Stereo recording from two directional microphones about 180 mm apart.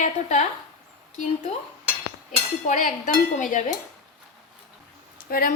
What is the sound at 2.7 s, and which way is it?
Speech, 45° left (ahead or behind).